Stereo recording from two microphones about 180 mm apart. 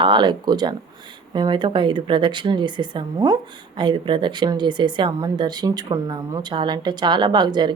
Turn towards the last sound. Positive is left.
turn(degrees=-25)  # may be behind; listen again after turning